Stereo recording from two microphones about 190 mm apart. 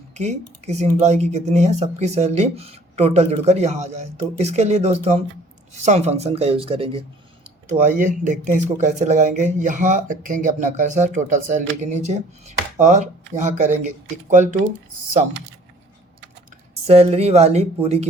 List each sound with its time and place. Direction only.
0.1 s speech: 35° right (ahead or behind)
7.7 s speech: 40° right (ahead or behind)
16.8 s speech: 35° right (ahead or behind)